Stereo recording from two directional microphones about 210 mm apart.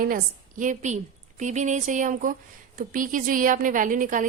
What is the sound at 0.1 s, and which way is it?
A woman's voice, 40° right (ahead or behind).